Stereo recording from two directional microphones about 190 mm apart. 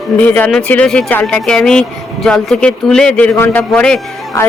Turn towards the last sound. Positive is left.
turn(degrees=15)  # may be behind; listen again after turning